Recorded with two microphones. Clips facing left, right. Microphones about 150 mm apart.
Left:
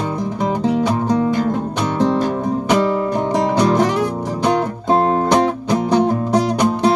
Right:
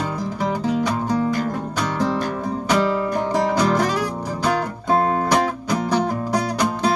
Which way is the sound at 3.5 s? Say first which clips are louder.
Left 4 dB; 20° left (ahead or behind).